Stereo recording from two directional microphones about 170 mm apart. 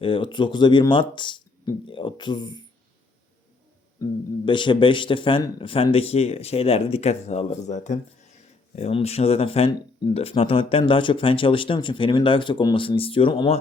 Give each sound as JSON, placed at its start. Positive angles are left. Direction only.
{"t": 0.0, "sound": "speech", "side_deg": 30}
{"t": 4.0, "sound": "speech", "side_deg": 30}